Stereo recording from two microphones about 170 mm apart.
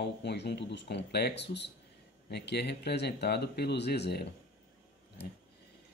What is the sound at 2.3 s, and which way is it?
Speech, 75° left (ahead or behind).